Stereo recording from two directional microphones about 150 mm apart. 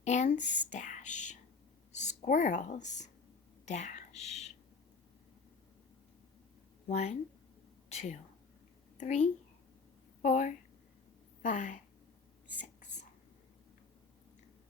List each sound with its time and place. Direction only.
0.0 s speech: 50° left (ahead or behind)
0.4 s speech: 10° right (ahead or behind)
0.7 s a woman's voice: 55° left (ahead or behind)
6.8 s speech: 50° left (ahead or behind)